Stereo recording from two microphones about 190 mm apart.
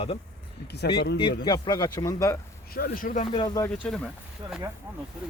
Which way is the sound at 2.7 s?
50° left (ahead or behind).